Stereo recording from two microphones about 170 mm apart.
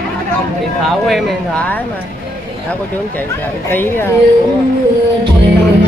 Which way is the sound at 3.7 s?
10° left (ahead or behind).